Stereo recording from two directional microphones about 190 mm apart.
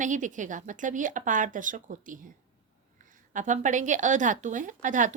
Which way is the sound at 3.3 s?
40° right (ahead or behind).